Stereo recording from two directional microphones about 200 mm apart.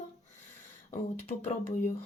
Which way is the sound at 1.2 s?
30° left (ahead or behind).